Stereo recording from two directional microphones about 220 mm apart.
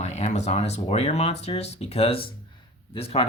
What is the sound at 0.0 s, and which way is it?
Speech, 30° left (ahead or behind).